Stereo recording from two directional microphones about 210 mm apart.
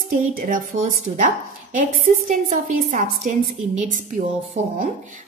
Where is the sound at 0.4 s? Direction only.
35° right (ahead or behind).